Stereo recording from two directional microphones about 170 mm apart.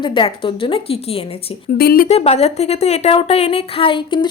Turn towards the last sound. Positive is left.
turn(degrees=30)  # may be behind; listen again after turning